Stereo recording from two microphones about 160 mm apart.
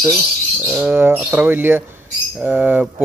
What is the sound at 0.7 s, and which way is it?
Speech, 10° right (ahead or behind).